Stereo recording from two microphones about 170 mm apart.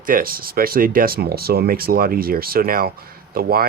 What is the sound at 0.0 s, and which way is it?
Speech, 55° right (ahead or behind).